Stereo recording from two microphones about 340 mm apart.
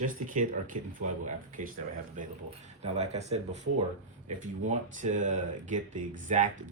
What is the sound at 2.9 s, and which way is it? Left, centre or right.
Speech, centre.